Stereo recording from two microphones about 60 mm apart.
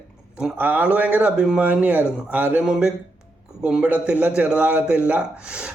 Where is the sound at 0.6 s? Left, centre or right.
Right.